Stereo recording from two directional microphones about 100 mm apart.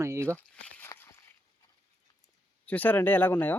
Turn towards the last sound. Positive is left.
turn(degrees=20)  # may be behind; listen again after turning